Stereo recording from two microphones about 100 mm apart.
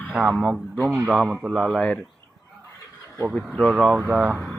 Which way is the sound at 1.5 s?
5° left (ahead or behind).